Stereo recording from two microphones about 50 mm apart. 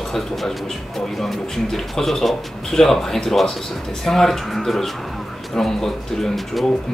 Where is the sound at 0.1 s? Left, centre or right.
Centre.